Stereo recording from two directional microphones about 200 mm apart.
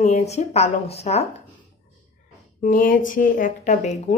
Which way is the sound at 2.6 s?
45° left (ahead or behind).